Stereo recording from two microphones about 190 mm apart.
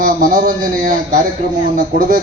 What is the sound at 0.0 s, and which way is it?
Speech, 50° right (ahead or behind).